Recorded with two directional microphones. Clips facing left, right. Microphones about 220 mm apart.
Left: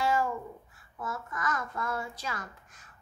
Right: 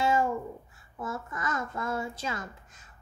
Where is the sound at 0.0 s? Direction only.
25° right (ahead or behind).